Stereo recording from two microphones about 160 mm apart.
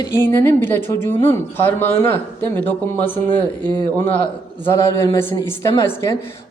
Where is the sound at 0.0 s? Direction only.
20° left (ahead or behind).